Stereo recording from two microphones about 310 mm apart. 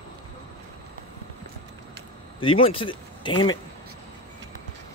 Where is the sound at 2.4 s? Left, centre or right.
Centre.